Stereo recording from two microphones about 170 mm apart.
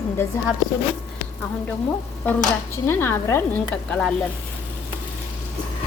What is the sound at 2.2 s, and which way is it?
Speech, 10° left (ahead or behind).